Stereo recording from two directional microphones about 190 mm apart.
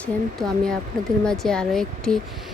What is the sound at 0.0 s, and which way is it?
Speech, 5° left (ahead or behind).